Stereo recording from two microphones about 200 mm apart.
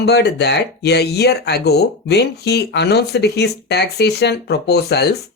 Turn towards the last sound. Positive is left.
turn(degrees=55)  # may be behind; listen again after turning